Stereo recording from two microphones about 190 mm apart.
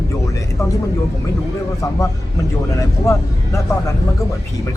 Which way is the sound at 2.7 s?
15° left (ahead or behind).